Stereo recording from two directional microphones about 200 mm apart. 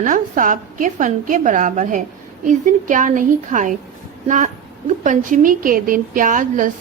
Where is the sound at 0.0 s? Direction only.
40° right (ahead or behind).